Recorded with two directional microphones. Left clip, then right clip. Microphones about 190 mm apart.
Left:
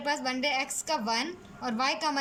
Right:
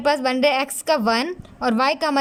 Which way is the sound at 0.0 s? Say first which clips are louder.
Right 11 dB; 55° right (ahead or behind).